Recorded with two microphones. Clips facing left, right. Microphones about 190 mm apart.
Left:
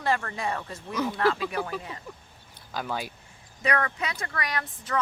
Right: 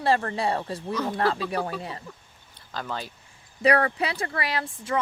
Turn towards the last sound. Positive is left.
turn(degrees=-25)  # may be behind; listen again after turning